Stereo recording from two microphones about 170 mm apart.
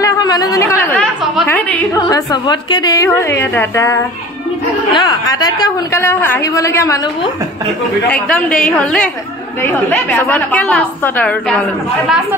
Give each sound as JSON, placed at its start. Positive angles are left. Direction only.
{"t": 0.0, "sound": "speech", "side_deg": 20}
{"t": 2.0, "sound": "a woman's voice", "side_deg": 25}
{"t": 8.1, "sound": "a woman's voice", "side_deg": 5}